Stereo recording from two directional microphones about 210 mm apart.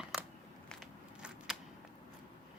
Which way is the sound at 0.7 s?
Centre (ahead or behind).